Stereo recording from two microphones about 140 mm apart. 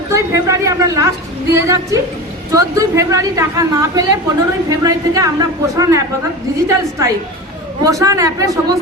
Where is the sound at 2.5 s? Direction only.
25° right (ahead or behind).